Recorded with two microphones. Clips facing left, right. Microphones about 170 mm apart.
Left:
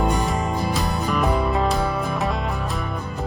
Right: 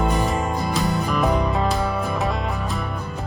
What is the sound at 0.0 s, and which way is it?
Music, centre (ahead or behind).